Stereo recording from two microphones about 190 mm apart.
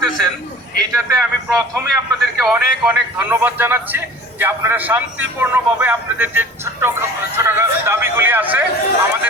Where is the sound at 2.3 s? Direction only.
5° right (ahead or behind).